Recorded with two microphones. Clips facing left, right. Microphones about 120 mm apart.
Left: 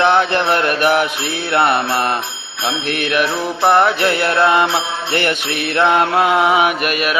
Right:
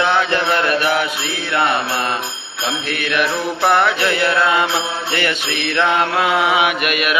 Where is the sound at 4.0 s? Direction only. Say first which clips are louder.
Left 2 dB; 45° left (ahead or behind).